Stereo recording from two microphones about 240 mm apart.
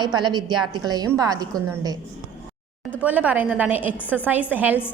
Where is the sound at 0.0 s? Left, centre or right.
Centre.